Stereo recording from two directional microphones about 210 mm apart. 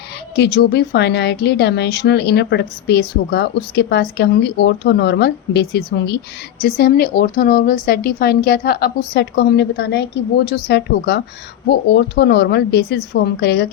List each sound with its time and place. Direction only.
0.3 s speech: 50° left (ahead or behind)